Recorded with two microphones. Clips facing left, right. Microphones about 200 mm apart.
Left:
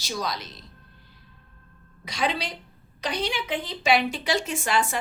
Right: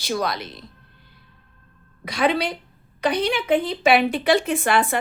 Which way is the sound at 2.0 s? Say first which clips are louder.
Right 7 dB; 55° right (ahead or behind).